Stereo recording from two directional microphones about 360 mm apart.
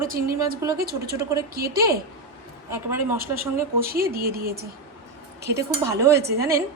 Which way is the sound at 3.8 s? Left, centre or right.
Right.